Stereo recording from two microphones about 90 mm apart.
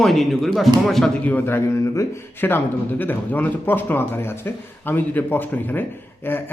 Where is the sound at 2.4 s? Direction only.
20° left (ahead or behind).